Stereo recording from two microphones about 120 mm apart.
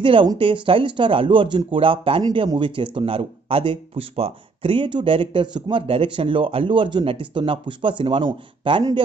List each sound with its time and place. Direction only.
0.0 s a man's voice: 45° right (ahead or behind)